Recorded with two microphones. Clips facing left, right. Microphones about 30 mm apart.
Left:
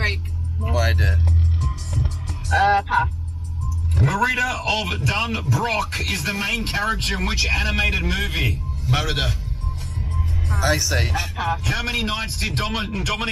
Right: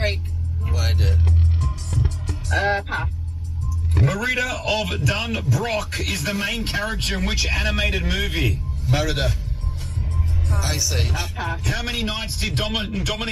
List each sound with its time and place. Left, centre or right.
0.7 s music: centre
2.5 s speech: centre
7.0 s speech: left
7.2 s speech: centre